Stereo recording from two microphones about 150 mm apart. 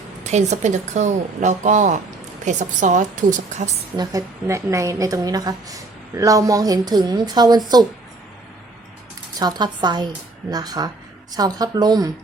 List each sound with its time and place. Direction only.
0.3 s a woman's voice: 50° right (ahead or behind)
3.9 s a woman's voice: 25° right (ahead or behind)
9.4 s a woman's voice: 30° right (ahead or behind)